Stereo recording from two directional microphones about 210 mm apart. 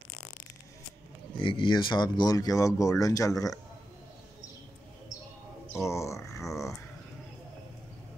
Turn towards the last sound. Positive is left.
turn(degrees=15)  # may be behind; listen again after turning